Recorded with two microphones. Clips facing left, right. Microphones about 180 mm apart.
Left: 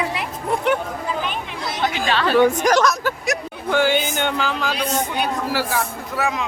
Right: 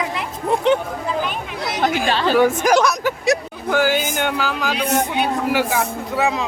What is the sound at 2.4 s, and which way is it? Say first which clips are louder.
Speech: even; 5° right (ahead or behind).